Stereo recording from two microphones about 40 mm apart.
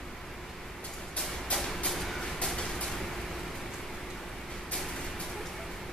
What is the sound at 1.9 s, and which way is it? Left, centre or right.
Train, centre.